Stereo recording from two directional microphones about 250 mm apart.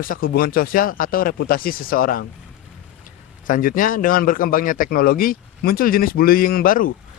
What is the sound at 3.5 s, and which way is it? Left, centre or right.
Speech, left.